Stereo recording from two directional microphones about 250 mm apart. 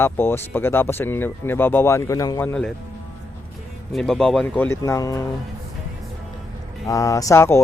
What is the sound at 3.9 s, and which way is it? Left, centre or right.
Speech, centre.